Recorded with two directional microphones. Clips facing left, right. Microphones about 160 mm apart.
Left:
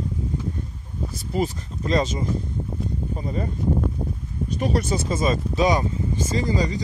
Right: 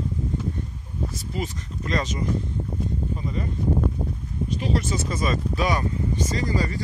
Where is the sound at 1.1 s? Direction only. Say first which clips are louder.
Left 10 dB; 35° left (ahead or behind).